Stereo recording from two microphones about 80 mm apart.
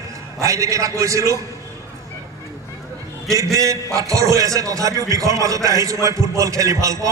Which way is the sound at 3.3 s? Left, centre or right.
Right.